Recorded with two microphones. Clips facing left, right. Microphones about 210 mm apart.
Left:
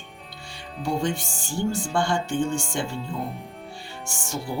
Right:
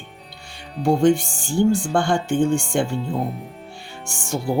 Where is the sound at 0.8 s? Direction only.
50° right (ahead or behind).